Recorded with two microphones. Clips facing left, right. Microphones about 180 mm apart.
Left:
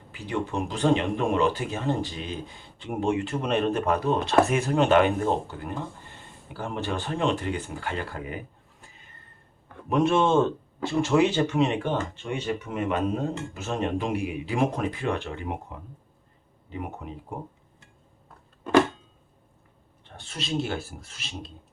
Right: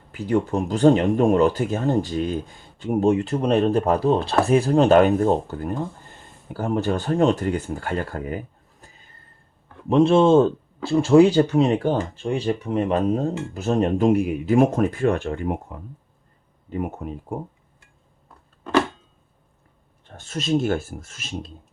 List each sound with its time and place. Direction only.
0.1 s speech: 40° right (ahead or behind)
9.9 s speech: 30° right (ahead or behind); by 15.6 s 45° right (ahead or behind)
16.6 s speech: 45° right (ahead or behind)
20.1 s speech: 45° right (ahead or behind)